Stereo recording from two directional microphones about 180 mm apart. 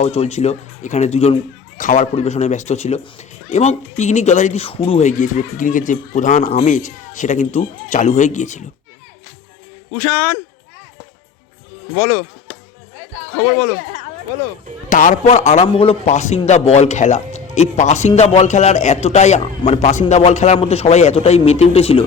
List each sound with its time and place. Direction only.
0.0 s a man's voice: 35° left (ahead or behind)
9.9 s speech: 10° left (ahead or behind)
11.9 s speech: 10° left (ahead or behind)
14.8 s a man's voice: 45° left (ahead or behind)